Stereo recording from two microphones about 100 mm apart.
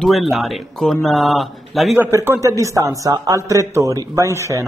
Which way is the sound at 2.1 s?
25° right (ahead or behind).